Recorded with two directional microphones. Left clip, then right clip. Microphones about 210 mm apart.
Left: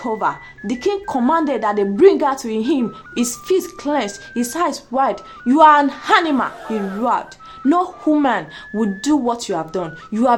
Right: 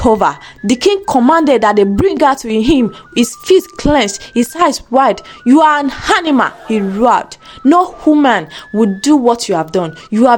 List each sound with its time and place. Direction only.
0.0 s speech: 50° right (ahead or behind); by 6.5 s 35° right (ahead or behind)
6.7 s speech: centre (ahead or behind)
7.0 s speech: 40° right (ahead or behind)